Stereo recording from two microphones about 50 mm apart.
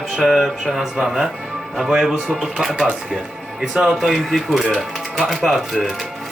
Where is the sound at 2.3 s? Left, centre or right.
Centre.